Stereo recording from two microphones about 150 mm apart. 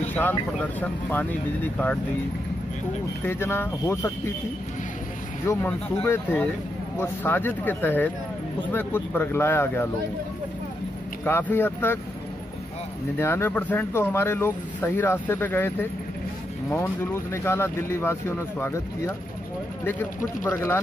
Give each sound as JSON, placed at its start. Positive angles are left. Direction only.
{"t": 0.1, "sound": "speech", "side_deg": 10}
{"t": 3.3, "sound": "speech", "side_deg": 15}
{"t": 5.5, "sound": "speech", "side_deg": 15}
{"t": 11.2, "sound": "speech", "side_deg": 15}
{"t": 13.2, "sound": "speech", "side_deg": 15}